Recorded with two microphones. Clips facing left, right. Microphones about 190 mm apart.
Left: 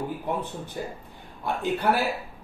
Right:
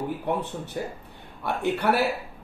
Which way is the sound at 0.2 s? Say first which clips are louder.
Right 2 dB; 65° right (ahead or behind).